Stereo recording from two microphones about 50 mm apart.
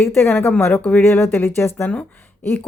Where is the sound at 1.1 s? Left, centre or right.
Left.